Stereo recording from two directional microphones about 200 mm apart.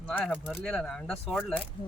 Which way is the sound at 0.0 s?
5° left (ahead or behind).